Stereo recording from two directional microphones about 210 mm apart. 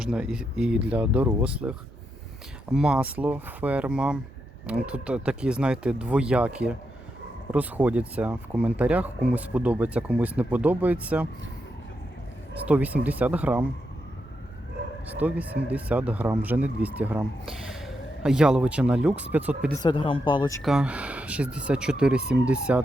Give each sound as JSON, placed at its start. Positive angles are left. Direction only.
{"t": 0.0, "sound": "speech", "side_deg": -5}
{"t": 12.6, "sound": "speech", "side_deg": -5}
{"t": 15.2, "sound": "speech", "side_deg": -10}
{"t": 19.7, "sound": "speech", "side_deg": 20}
{"t": 20.6, "sound": "speech", "side_deg": 0}